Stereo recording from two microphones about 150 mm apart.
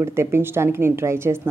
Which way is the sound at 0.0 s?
15° right (ahead or behind).